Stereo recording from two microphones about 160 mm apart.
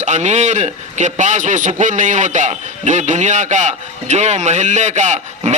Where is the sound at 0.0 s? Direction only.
45° right (ahead or behind).